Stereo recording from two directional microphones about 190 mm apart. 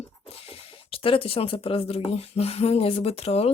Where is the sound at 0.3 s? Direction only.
30° left (ahead or behind).